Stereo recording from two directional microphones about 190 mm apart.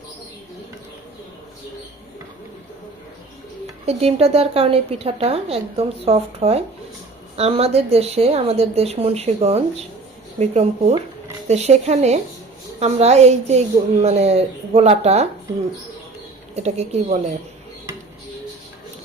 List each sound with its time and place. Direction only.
3.8 s a woman's voice: 30° right (ahead or behind)
16.6 s a woman's voice: 35° right (ahead or behind)